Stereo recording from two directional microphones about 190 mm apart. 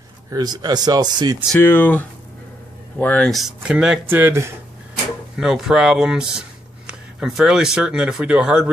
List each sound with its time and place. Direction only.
0.3 s speech: 20° right (ahead or behind)
1.5 s speech: 10° left (ahead or behind); by 4.6 s 15° right (ahead or behind)
5.4 s speech: centre (ahead or behind)